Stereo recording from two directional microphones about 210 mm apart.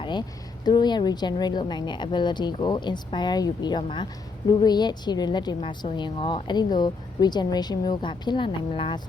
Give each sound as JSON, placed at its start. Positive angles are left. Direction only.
{"t": 0.0, "sound": "speech", "side_deg": 20}